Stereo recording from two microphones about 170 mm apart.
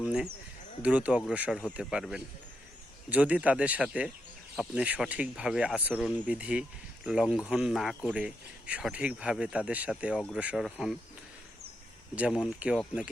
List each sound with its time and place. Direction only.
0.0 s speech: 5° right (ahead or behind)
12.1 s speech: 5° right (ahead or behind)